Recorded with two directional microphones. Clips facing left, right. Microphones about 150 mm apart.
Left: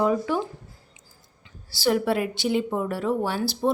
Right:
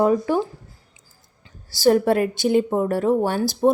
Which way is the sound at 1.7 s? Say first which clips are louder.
Right 6 dB; 45° right (ahead or behind).